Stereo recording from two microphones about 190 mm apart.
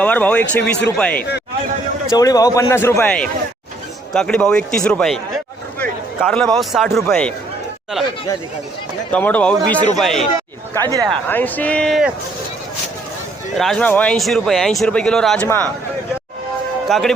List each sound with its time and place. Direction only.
0.0 s a man's voice: 10° left (ahead or behind)
2.0 s a man's voice: 20° left (ahead or behind); by 7.3 s 5° left (ahead or behind)
9.1 s a man's voice: 5° left (ahead or behind)
10.8 s speech: 20° right (ahead or behind)
11.3 s a man's voice: 10° left (ahead or behind)
13.6 s a man's voice: 5° left (ahead or behind)
16.9 s speech: centre (ahead or behind)